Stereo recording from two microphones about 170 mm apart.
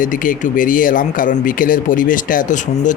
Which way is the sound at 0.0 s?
50° left (ahead or behind).